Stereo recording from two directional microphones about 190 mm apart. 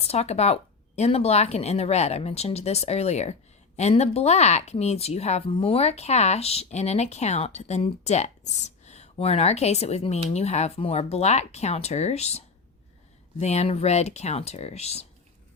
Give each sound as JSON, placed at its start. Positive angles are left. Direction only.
{"t": 0.0, "sound": "speech", "side_deg": 35}
{"t": 13.4, "sound": "speech", "side_deg": 35}